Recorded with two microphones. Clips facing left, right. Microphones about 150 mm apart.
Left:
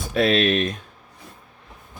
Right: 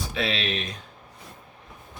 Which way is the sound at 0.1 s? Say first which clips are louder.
Left 11 dB; 50° left (ahead or behind).